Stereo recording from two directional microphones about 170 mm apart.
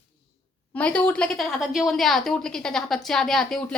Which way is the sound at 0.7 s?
5° left (ahead or behind).